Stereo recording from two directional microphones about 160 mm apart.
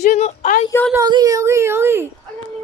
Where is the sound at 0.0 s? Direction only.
45° left (ahead or behind).